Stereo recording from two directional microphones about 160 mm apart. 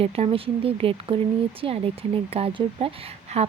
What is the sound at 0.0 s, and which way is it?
Speech, 35° right (ahead or behind).